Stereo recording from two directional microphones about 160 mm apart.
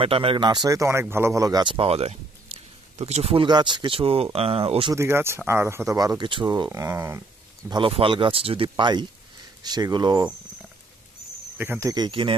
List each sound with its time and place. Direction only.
0.0 s speech: 35° right (ahead or behind)
3.4 s speech: 30° right (ahead or behind)
4.9 s speech: 15° right (ahead or behind)
7.7 s speech: 35° right (ahead or behind)
11.5 s speech: 10° right (ahead or behind)
11.9 s speech: 30° right (ahead or behind)